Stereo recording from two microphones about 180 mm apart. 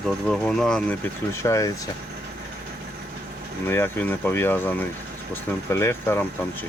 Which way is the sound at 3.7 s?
10° left (ahead or behind).